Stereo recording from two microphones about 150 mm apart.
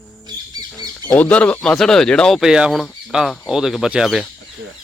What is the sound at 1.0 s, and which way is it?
Speech, 10° left (ahead or behind).